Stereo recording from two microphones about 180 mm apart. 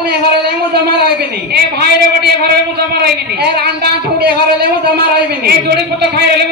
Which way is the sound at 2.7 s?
60° right (ahead or behind).